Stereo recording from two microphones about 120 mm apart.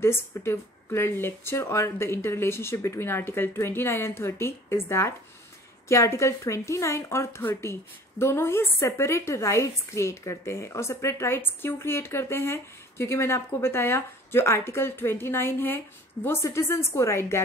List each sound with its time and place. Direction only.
0.0 s a woman's voice: 20° left (ahead or behind)